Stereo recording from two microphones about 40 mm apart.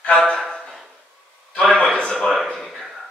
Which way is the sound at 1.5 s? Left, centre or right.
Left.